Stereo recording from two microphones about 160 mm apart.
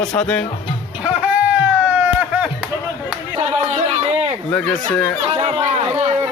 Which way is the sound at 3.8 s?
45° right (ahead or behind).